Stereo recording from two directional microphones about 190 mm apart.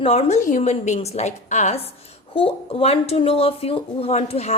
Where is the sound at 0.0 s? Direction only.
35° left (ahead or behind).